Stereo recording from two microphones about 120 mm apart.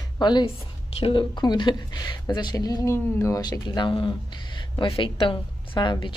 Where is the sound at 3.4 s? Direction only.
35° left (ahead or behind).